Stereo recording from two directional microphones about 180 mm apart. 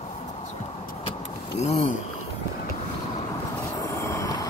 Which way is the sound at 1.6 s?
35° left (ahead or behind).